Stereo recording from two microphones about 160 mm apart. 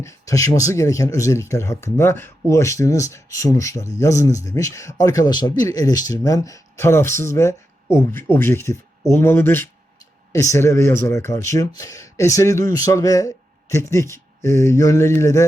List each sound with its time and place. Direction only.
0.0 s speech: 20° left (ahead or behind)